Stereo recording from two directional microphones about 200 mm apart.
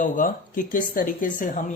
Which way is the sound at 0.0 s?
40° left (ahead or behind).